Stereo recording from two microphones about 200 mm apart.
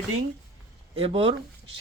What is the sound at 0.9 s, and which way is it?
Speech, 30° right (ahead or behind).